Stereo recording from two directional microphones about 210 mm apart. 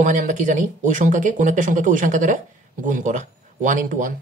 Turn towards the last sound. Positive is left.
turn(degrees=-40)  # may be behind; listen again after turning